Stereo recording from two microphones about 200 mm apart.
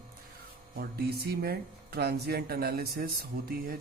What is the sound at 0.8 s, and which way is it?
A man's voice, 50° right (ahead or behind).